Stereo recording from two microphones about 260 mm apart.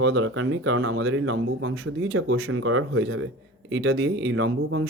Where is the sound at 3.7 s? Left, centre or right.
Right.